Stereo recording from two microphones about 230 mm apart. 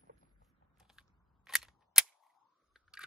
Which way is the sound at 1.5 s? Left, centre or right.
Centre.